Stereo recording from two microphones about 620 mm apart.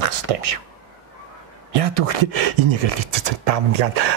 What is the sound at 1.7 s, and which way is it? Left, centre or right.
A woman's voice, right.